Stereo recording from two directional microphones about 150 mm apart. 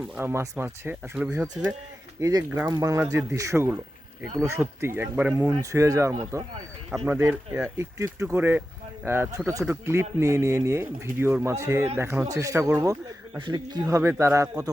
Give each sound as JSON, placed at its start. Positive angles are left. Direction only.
{"t": 0.2, "sound": "speech", "side_deg": -15}
{"t": 2.2, "sound": "speech", "side_deg": -25}